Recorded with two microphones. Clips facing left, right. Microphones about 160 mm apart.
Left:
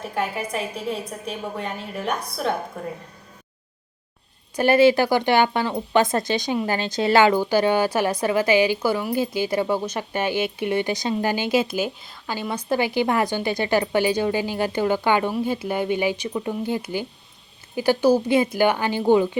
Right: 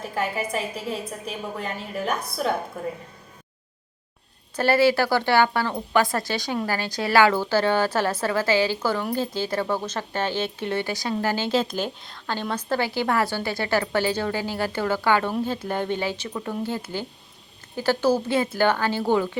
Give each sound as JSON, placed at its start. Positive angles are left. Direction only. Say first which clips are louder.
{"t": 0.1, "sound": "a woman's voice", "louder": "even", "side_deg": 0}
{"t": 4.5, "sound": "speech", "louder": "left 3 dB", "side_deg": 15}